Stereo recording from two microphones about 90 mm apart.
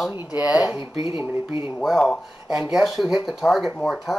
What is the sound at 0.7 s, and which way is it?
Speech, 65° left (ahead or behind).